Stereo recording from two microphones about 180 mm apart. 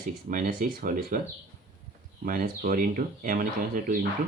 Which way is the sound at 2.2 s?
50° right (ahead or behind).